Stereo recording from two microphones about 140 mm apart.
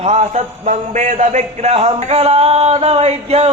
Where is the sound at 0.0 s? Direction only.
50° right (ahead or behind).